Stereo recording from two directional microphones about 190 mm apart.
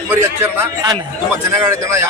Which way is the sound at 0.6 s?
20° right (ahead or behind).